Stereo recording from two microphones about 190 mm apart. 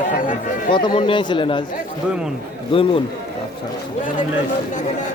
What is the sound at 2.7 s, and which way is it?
Speech, 30° left (ahead or behind).